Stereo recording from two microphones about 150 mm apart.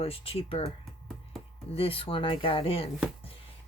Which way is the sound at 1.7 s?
40° left (ahead or behind).